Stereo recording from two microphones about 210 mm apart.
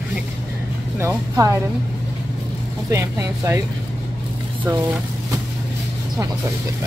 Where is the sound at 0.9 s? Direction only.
15° right (ahead or behind).